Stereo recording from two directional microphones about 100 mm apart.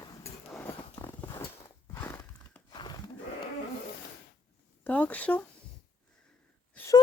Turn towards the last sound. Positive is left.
turn(degrees=15)  # may be behind; listen again after turning